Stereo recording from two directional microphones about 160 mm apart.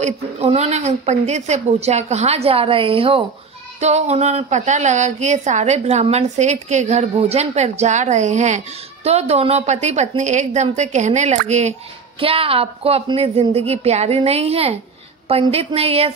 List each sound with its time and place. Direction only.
0.4 s a woman's voice: 40° right (ahead or behind)